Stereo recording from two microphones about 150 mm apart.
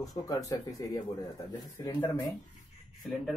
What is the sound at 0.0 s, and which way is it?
Speech, 25° left (ahead or behind).